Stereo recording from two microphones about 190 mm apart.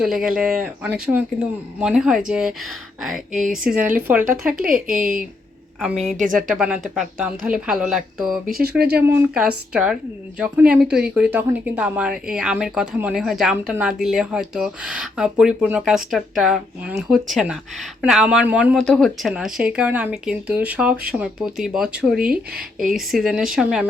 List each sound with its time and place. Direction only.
0.0 s a woman's voice: 5° right (ahead or behind)
4.7 s speech: 45° right (ahead or behind)
6.3 s a woman's voice: 5° right (ahead or behind)
8.4 s speech: 50° right (ahead or behind)
8.9 s a woman's voice: 10° right (ahead or behind)